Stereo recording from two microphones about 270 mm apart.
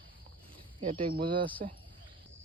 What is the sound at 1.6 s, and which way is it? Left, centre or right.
Speech, right.